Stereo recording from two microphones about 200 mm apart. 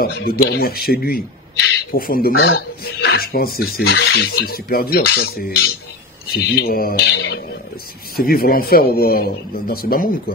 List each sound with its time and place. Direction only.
0.0 s speech: 50° left (ahead or behind)